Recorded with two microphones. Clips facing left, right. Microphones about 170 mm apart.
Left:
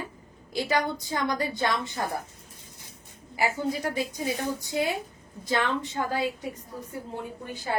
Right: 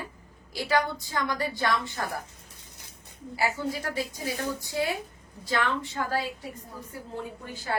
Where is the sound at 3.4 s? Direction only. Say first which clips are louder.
Left 2 dB; 20° left (ahead or behind).